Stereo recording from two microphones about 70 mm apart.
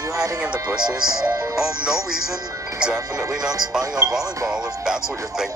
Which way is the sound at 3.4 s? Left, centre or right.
Right.